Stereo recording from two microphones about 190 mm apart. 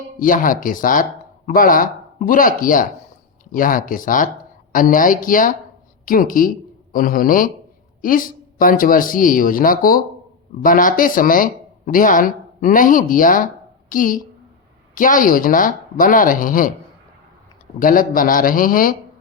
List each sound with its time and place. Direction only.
0.2 s speech: 45° left (ahead or behind)
17.7 s speech: 45° left (ahead or behind)